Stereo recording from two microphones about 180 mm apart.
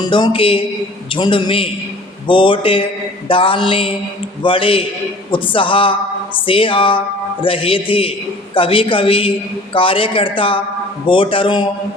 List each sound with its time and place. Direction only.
0.0 s speech: 25° left (ahead or behind)